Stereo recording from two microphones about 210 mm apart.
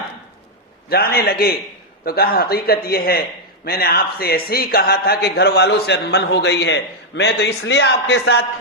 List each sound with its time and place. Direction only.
0.9 s a man's voice: 50° left (ahead or behind)